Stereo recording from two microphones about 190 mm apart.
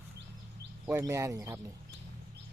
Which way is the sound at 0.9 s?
15° right (ahead or behind).